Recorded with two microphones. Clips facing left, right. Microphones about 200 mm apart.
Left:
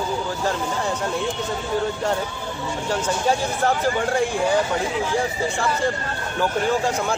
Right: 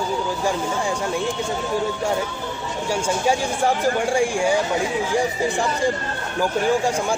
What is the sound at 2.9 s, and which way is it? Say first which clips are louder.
Speech: right 1 dB; 10° right (ahead or behind).